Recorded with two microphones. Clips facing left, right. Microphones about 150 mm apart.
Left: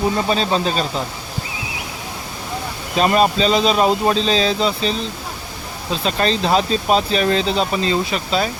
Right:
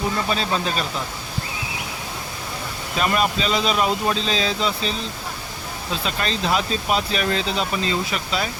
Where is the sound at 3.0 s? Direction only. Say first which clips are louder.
Left 6 dB; 30° left (ahead or behind).